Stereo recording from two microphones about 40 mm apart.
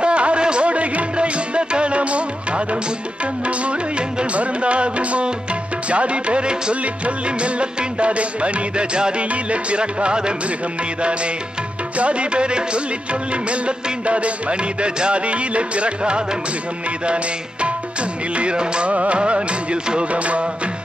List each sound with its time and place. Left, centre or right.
0.0 s music: right
4.2 s music: right
12.0 s music: right